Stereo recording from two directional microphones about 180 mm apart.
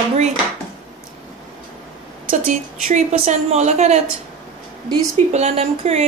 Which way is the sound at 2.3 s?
50° right (ahead or behind).